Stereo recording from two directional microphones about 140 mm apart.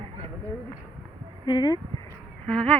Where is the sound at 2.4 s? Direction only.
5° left (ahead or behind).